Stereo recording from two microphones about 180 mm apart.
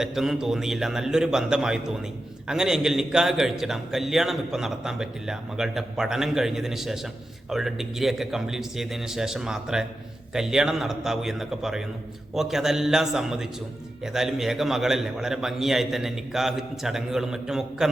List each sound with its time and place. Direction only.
0.0 s a man's voice: centre (ahead or behind)